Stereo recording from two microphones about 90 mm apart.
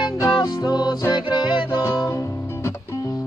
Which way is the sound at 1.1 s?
55° left (ahead or behind).